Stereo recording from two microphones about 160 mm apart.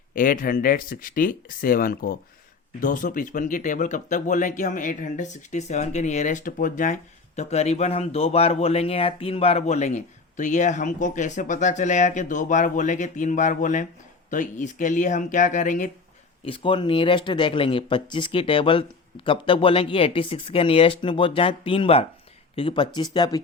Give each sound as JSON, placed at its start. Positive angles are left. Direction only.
{"t": 0.1, "sound": "speech", "side_deg": 60}
{"t": 16.5, "sound": "speech", "side_deg": 30}